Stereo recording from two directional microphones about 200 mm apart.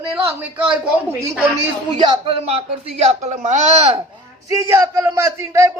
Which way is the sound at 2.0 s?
30° right (ahead or behind).